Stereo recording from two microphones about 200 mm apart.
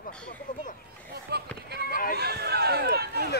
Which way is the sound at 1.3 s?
55° right (ahead or behind).